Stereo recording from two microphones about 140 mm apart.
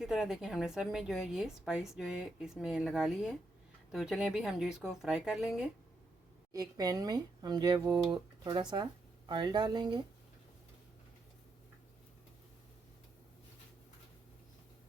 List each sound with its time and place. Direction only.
0.0 s a woman's voice: 5° right (ahead or behind)
6.5 s speech: 25° right (ahead or behind)